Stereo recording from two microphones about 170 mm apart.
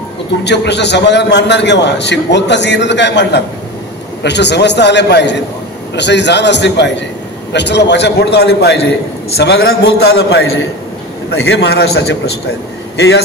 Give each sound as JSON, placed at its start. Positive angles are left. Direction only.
{"t": 0.4, "sound": "a man's voice", "side_deg": 90}
{"t": 12.9, "sound": "a man's voice", "side_deg": 90}